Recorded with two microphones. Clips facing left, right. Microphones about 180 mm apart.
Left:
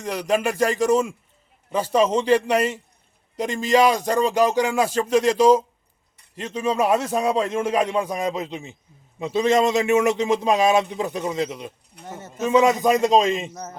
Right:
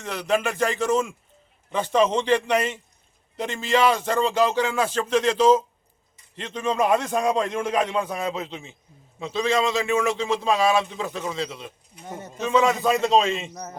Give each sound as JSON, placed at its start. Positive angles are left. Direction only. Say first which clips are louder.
{"t": 0.0, "sound": "a man's voice", "louder": "left 2 dB", "side_deg": 10}
{"t": 13.5, "sound": "a man's voice", "louder": "left 1 dB", "side_deg": 0}